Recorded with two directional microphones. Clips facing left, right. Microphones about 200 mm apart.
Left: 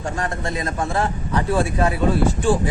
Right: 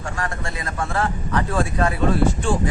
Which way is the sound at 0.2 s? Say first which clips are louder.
Left 3 dB; 20° left (ahead or behind).